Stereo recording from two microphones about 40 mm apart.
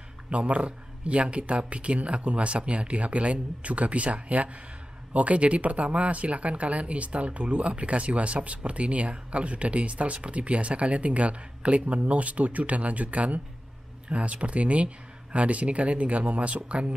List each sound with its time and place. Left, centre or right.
0.3 s speech: right